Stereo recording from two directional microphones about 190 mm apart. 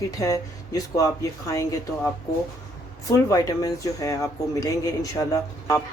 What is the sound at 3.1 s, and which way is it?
Speech, 15° left (ahead or behind).